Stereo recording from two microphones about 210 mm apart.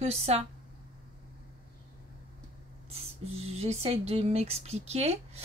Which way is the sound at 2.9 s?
30° right (ahead or behind).